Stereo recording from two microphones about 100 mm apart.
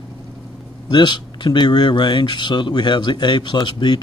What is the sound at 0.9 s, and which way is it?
Speech, 50° left (ahead or behind).